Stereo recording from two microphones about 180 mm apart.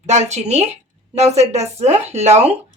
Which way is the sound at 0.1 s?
40° right (ahead or behind).